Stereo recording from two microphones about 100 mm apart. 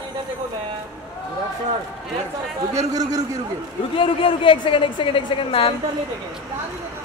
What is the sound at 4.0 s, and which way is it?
Speech, 60° left (ahead or behind).